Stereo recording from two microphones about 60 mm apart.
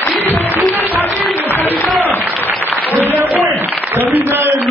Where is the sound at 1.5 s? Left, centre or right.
Left.